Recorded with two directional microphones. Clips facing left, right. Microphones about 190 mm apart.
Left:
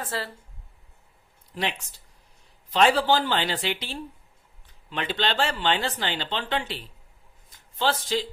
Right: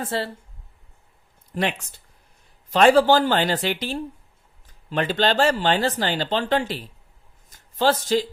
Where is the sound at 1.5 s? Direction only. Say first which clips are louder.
Right 5 dB; 50° right (ahead or behind).